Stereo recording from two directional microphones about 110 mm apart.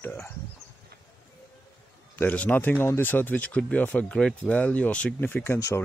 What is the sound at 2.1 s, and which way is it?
Speech, 15° left (ahead or behind).